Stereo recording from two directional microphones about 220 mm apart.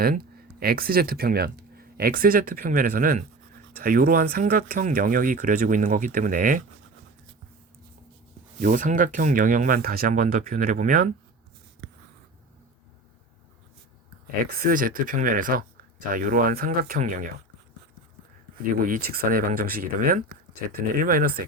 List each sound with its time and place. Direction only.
0.0 s speech: 45° right (ahead or behind)
8.6 s speech: 35° right (ahead or behind)
14.5 s speech: 40° right (ahead or behind)
18.7 s speech: 40° right (ahead or behind)